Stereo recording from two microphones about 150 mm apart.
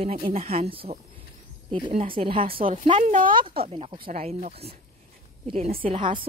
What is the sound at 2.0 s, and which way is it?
Speech, 35° right (ahead or behind).